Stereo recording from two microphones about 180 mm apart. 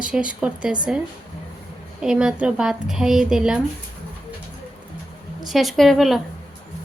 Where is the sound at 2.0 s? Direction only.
5° right (ahead or behind).